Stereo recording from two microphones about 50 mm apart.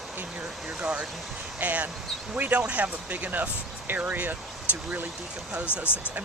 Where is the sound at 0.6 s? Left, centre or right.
Right.